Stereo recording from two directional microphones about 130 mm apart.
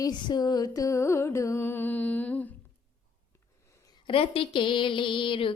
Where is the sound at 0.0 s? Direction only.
35° left (ahead or behind); by 2.5 s 10° left (ahead or behind).